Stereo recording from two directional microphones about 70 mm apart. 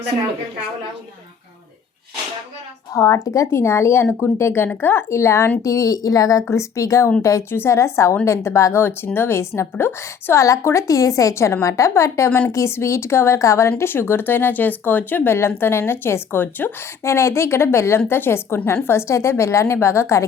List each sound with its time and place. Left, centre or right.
2.9 s speech: left
5.6 s a woman's voice: left
17.0 s speech: left